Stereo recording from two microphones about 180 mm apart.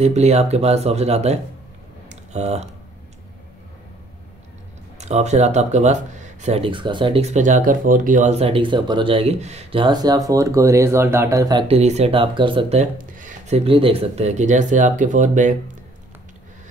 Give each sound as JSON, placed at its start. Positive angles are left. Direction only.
{"t": 0.0, "sound": "speech", "side_deg": -40}
{"t": 2.0, "sound": "a sound", "side_deg": -40}
{"t": 4.9, "sound": "speech", "side_deg": -40}
{"t": 11.6, "sound": "speech", "side_deg": -35}
{"t": 12.9, "sound": "a sound", "side_deg": -45}
{"t": 13.7, "sound": "speech", "side_deg": -30}